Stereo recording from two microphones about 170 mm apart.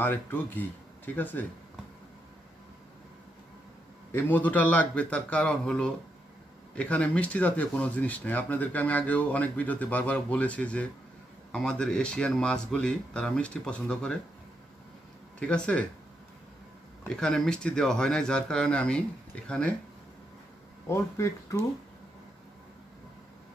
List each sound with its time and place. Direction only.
0.0 s speech: 10° left (ahead or behind)
4.1 s speech: 10° left (ahead or behind)
15.3 s speech: 5° left (ahead or behind)
17.1 s speech: 5° left (ahead or behind)
20.8 s speech: 15° left (ahead or behind)